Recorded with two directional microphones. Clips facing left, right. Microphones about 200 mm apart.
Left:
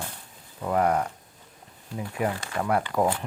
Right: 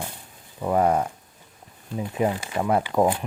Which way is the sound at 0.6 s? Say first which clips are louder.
Right 3 dB; 20° right (ahead or behind).